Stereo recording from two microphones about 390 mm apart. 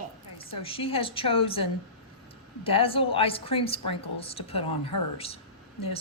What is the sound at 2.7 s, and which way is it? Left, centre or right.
A woman's voice, centre.